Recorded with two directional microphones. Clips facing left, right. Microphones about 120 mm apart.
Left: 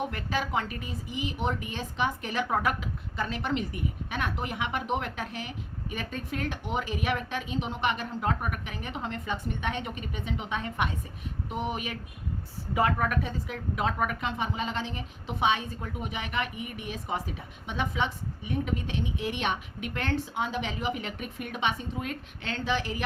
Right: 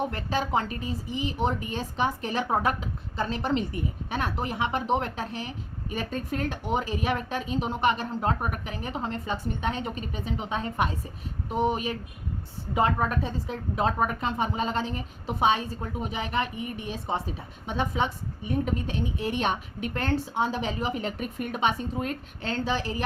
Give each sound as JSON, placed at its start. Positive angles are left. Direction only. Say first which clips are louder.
{"t": 0.1, "sound": "a woman's voice", "louder": "right 3 dB", "side_deg": -30}